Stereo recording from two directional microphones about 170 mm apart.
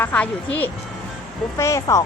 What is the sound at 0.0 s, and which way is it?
A woman's voice, 10° left (ahead or behind).